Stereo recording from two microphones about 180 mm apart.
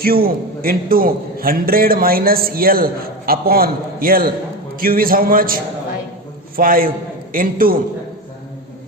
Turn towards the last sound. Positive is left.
turn(degrees=-50)  # may be behind; listen again after turning